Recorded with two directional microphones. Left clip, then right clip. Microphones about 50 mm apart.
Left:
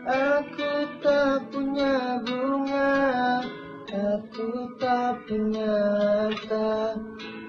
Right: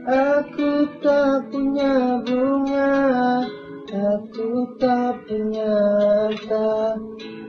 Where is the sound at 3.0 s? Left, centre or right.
Right.